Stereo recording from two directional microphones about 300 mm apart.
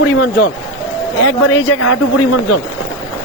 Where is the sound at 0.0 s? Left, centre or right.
Left.